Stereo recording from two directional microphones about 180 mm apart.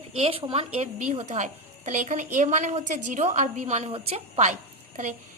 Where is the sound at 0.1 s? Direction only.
30° right (ahead or behind).